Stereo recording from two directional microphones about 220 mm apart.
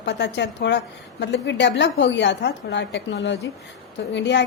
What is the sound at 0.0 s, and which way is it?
A woman's voice, 50° left (ahead or behind).